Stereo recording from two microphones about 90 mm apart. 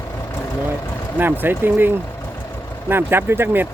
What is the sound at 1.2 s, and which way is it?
Speech, 20° right (ahead or behind).